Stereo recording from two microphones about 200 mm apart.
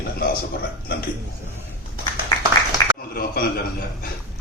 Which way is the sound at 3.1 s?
50° left (ahead or behind).